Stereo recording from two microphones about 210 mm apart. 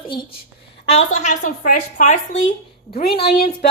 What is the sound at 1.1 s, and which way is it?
A woman's voice, 35° left (ahead or behind).